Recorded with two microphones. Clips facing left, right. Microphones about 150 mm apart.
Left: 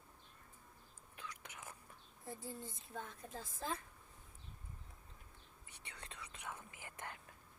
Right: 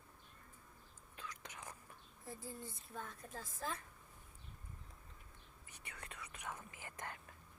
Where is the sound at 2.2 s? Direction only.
20° left (ahead or behind).